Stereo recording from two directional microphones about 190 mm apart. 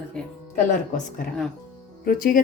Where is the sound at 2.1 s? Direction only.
45° left (ahead or behind).